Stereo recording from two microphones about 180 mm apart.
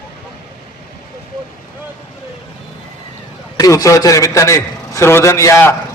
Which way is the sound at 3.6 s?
20° left (ahead or behind).